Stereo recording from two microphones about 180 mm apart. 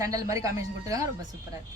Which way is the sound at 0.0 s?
20° right (ahead or behind).